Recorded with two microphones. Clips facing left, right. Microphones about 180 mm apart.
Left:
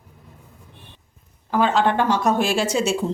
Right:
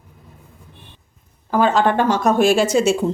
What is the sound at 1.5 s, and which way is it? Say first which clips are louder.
Speech: right 3 dB; 45° right (ahead or behind).